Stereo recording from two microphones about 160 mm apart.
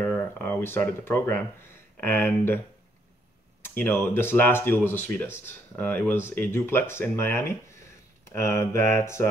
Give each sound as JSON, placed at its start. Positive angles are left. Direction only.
{"t": 0.0, "sound": "a sound", "side_deg": 10}
{"t": 2.0, "sound": "speech", "side_deg": 15}
{"t": 3.6, "sound": "speech", "side_deg": 15}